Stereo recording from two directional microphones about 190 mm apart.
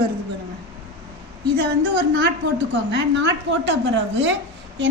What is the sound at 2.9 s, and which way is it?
A woman's voice, 75° right (ahead or behind).